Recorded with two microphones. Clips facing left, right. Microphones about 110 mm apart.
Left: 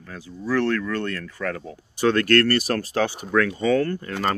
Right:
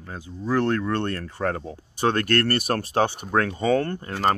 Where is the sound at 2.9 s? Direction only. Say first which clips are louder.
Right 1 dB; 30° right (ahead or behind).